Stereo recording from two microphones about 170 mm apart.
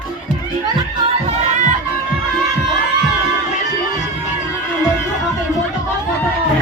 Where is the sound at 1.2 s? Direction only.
50° right (ahead or behind).